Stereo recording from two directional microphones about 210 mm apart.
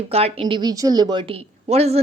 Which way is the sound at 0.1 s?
30° right (ahead or behind).